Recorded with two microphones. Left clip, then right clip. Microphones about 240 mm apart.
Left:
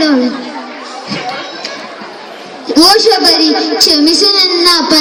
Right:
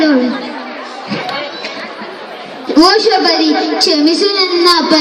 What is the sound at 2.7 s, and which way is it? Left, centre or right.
A woman's voice, left.